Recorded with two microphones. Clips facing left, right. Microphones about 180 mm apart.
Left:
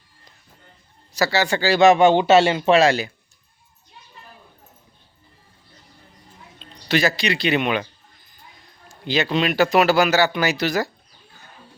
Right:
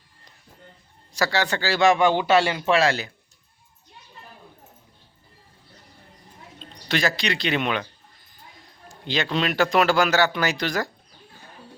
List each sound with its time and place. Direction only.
1.1 s speech: 5° left (ahead or behind)
6.8 s a man's voice: 5° left (ahead or behind)
8.9 s a man's voice: 5° left (ahead or behind)